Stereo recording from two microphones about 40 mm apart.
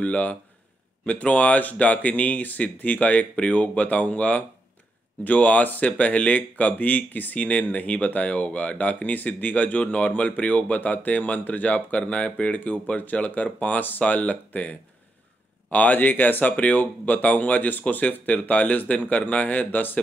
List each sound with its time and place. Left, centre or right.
0.0 s speech: left
7.4 s speech: left